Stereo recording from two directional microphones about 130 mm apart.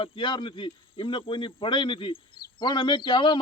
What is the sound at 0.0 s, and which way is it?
Speech, 40° left (ahead or behind).